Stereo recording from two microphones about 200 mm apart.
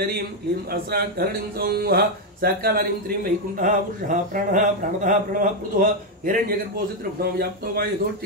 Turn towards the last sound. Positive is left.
turn(degrees=-50)  # may be behind; listen again after turning